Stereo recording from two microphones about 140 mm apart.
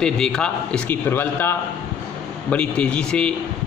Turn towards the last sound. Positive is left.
turn(degrees=5)  # may be behind; listen again after turning